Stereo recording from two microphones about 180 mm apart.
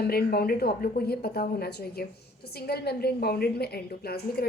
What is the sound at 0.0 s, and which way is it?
A woman's voice, 60° left (ahead or behind).